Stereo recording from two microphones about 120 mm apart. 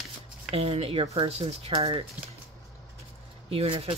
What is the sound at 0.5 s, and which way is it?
Speech, 50° right (ahead or behind).